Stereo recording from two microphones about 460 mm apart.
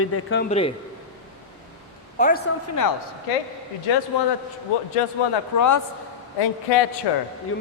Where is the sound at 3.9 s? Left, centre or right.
Left.